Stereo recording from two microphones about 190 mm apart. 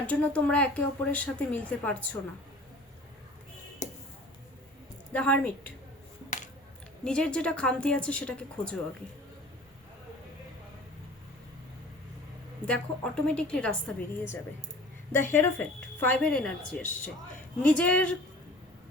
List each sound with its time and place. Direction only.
0.1 s speech: 5° left (ahead or behind)
3.8 s a sound: 40° left (ahead or behind)
5.1 s speech: 5° left (ahead or behind)
7.0 s a woman's voice: 5° left (ahead or behind)
12.6 s a woman's voice: 5° left (ahead or behind)